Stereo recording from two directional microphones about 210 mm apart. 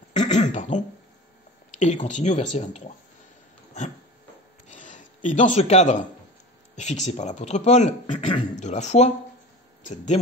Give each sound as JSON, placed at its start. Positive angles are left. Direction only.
{"t": 0.2, "sound": "speech", "side_deg": 35}
{"t": 1.7, "sound": "a sound", "side_deg": 35}
{"t": 2.0, "sound": "speech", "side_deg": 35}
{"t": 4.6, "sound": "speech", "side_deg": 35}